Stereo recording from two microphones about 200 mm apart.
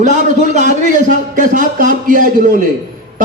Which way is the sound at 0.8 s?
40° right (ahead or behind).